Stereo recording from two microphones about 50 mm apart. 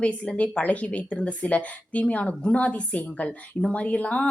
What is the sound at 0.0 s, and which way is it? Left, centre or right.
Speech, left.